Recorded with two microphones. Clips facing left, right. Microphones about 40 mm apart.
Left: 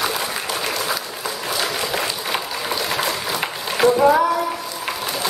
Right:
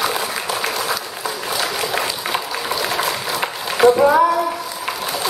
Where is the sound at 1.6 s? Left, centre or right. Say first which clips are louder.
Right 2 dB; centre.